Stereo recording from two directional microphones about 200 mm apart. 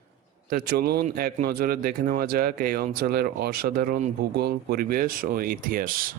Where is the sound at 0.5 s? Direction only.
50° right (ahead or behind).